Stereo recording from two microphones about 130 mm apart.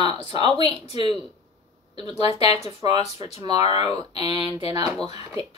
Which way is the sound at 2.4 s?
50° left (ahead or behind).